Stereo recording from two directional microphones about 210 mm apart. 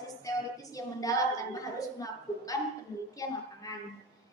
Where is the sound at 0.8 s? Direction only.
15° left (ahead or behind).